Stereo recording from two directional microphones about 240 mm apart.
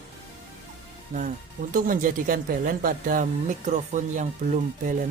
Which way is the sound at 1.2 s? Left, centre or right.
Right.